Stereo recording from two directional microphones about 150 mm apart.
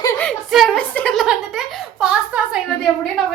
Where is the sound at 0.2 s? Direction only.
5° left (ahead or behind).